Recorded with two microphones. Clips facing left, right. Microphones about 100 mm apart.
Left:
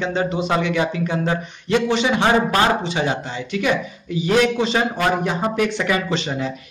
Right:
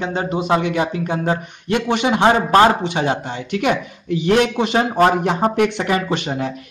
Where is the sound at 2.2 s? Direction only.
35° right (ahead or behind).